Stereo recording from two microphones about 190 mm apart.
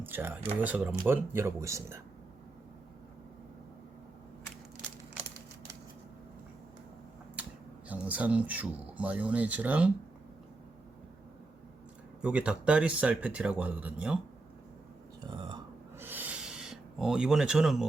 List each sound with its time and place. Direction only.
0.0 s speech: 10° right (ahead or behind)
7.9 s speech: 5° right (ahead or behind)
12.2 s speech: 5° right (ahead or behind)
15.3 s burping: 25° right (ahead or behind)
16.0 s a sound: 10° right (ahead or behind)